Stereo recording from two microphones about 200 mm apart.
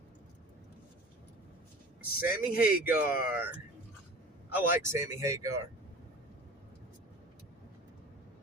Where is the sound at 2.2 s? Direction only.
50° left (ahead or behind).